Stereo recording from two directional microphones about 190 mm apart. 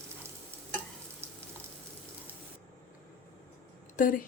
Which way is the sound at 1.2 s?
15° right (ahead or behind).